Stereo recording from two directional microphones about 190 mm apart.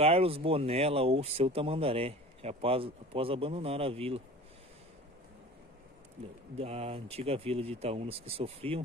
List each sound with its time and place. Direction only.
0.0 s speech: 30° right (ahead or behind)
6.6 s speech: 30° right (ahead or behind)